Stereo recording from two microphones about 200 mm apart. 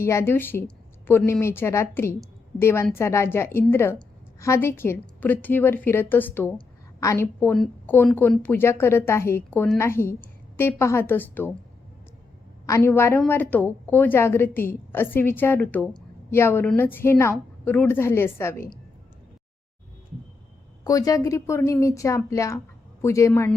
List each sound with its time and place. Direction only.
0.0 s a woman's voice: 15° left (ahead or behind)
12.6 s a woman's voice: 15° left (ahead or behind)
20.8 s a woman's voice: 15° left (ahead or behind)